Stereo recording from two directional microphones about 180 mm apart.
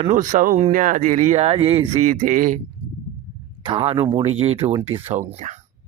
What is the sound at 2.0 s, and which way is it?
Speech, 50° right (ahead or behind).